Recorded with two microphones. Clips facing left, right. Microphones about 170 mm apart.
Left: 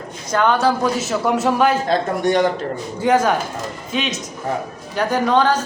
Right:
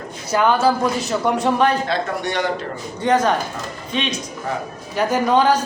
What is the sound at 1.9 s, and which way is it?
Speech, 45° left (ahead or behind).